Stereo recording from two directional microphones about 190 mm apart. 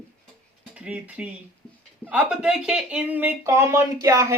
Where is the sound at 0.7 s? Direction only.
5° right (ahead or behind).